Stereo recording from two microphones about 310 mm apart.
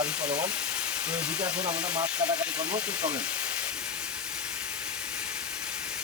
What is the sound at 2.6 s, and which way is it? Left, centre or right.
Speech, centre.